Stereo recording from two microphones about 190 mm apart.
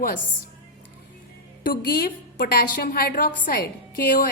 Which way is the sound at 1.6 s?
50° left (ahead or behind).